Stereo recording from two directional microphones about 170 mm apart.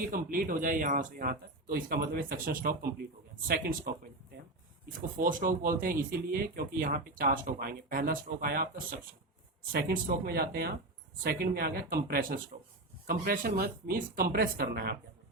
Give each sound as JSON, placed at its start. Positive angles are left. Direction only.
{"t": 0.1, "sound": "speech", "side_deg": -55}